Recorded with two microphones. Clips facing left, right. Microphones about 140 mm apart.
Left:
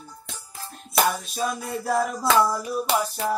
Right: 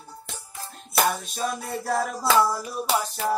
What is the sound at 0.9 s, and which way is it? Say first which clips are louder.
Music: left 1 dB; centre (ahead or behind).